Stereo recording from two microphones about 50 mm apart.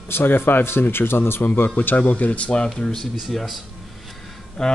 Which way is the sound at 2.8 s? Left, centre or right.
Centre.